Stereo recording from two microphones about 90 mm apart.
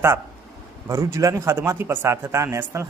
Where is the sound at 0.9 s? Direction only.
35° right (ahead or behind).